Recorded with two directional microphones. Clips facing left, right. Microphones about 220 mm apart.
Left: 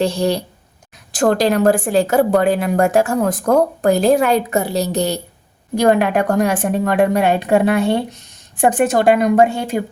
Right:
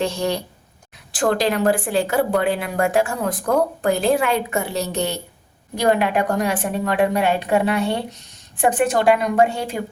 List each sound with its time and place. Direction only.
0.0 s speech: 35° left (ahead or behind)
5.7 s speech: 50° left (ahead or behind)